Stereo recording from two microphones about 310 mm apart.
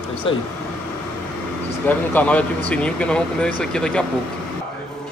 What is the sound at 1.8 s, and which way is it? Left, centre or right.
Speech, centre.